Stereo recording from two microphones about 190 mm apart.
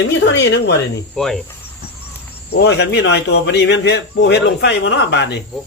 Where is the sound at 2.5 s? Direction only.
60° left (ahead or behind).